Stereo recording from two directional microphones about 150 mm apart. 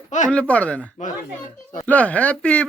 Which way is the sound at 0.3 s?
10° left (ahead or behind).